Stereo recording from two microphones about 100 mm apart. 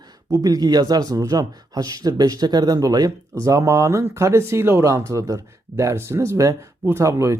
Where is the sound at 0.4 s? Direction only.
40° right (ahead or behind).